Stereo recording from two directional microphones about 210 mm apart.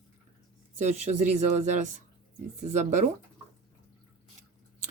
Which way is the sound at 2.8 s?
35° right (ahead or behind).